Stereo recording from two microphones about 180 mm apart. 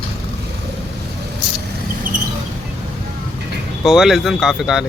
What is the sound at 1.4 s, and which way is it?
Vehicle, 5° right (ahead or behind).